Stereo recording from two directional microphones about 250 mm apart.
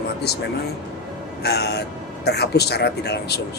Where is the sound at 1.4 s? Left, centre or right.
Left.